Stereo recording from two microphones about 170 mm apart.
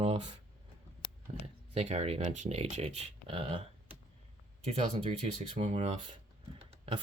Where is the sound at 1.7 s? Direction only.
40° right (ahead or behind).